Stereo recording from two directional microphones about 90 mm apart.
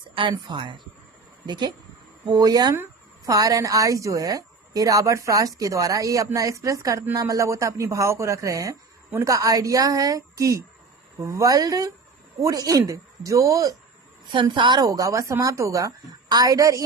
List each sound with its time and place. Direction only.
0.1 s a woman's voice: 70° right (ahead or behind); by 13.7 s 40° right (ahead or behind)
14.5 s a woman's voice: 60° right (ahead or behind)
14.8 s a woman's voice: 40° right (ahead or behind)